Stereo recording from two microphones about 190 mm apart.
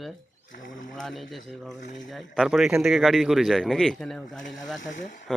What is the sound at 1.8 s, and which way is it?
Speech, 40° left (ahead or behind).